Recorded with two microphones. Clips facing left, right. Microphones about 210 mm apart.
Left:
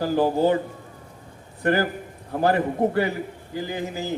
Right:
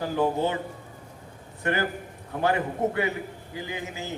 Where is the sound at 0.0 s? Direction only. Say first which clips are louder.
Left 5 dB; 35° left (ahead or behind).